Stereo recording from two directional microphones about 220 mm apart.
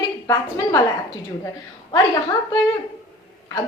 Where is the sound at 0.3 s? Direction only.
15° left (ahead or behind).